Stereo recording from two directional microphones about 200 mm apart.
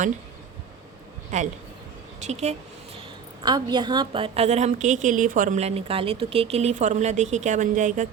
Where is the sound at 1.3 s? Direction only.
35° right (ahead or behind).